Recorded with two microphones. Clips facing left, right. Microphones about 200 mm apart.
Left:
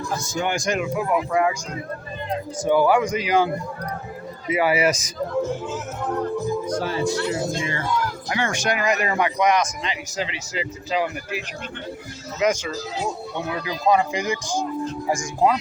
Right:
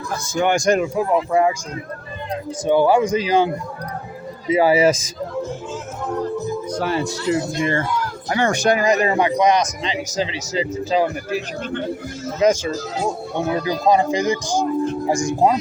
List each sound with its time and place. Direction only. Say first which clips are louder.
0.4 s speech: right 8 dB; 45° right (ahead or behind)
0.9 s a man's voice: right 4 dB; 30° right (ahead or behind)
2.6 s a man's voice: right 3 dB; 25° right (ahead or behind)
6.7 s speech: right 3 dB; 65° right (ahead or behind)
7.3 s speech: right 5 dB; 55° right (ahead or behind)
8.3 s a man's voice: right 8 dB; 40° right (ahead or behind)
8.9 s a man's voice: right 5 dB; 30° right (ahead or behind)
12.7 s a man's voice: right 4 dB; 50° right (ahead or behind)
14.4 s speech: right 6 dB; 80° right